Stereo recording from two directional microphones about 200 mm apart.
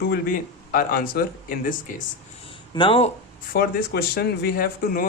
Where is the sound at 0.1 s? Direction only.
45° left (ahead or behind).